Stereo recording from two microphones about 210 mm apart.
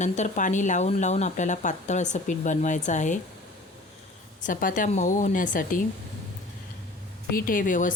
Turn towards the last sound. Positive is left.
turn(degrees=40)  # may be behind; listen again after turning